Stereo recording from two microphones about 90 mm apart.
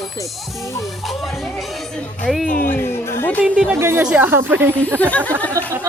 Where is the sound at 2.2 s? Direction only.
Centre (ahead or behind).